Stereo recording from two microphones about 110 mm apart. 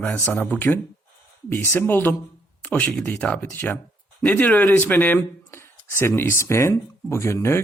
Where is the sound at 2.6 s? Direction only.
10° left (ahead or behind).